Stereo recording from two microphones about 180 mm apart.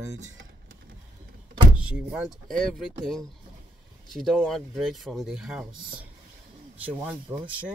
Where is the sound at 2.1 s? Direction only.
5° right (ahead or behind).